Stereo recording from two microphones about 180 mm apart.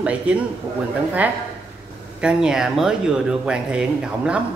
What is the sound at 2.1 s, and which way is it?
Speech, 5° right (ahead or behind).